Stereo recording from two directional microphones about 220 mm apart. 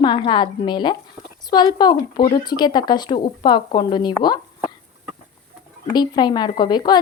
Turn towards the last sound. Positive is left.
turn(degrees=20)  # may be behind; listen again after turning